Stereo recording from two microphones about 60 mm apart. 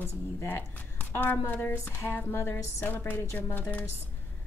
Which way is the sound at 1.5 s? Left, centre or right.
Left.